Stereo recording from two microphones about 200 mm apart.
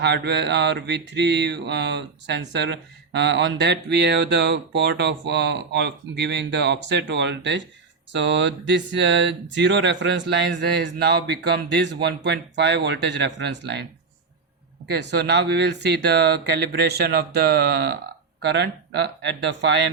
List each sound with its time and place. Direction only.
0.0 s mantra: 60° right (ahead or behind)
14.8 s mantra: 55° right (ahead or behind)